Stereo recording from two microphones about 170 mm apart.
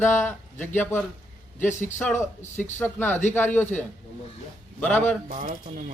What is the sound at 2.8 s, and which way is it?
Speech, 10° left (ahead or behind).